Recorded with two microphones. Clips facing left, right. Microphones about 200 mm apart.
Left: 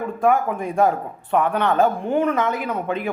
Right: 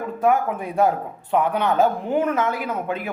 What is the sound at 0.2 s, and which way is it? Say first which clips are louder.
A man's voice: left 1 dB; 5° right (ahead or behind).